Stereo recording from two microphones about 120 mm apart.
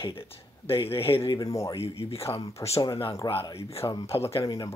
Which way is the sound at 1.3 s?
30° left (ahead or behind).